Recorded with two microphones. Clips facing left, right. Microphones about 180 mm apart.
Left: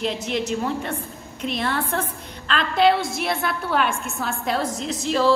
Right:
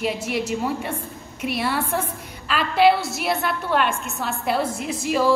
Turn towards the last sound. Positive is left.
turn(degrees=-10)  # may be behind; listen again after turning